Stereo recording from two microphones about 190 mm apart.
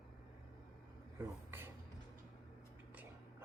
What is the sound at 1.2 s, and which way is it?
Speech, 10° right (ahead or behind).